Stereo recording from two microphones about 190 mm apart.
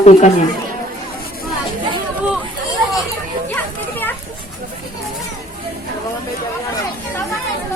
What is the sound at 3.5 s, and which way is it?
Children playing, 10° left (ahead or behind).